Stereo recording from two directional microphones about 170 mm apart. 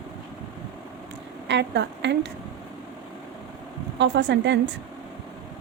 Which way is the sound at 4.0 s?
90° right.